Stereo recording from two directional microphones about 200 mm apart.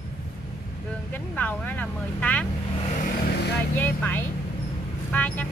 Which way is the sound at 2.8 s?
35° left (ahead or behind).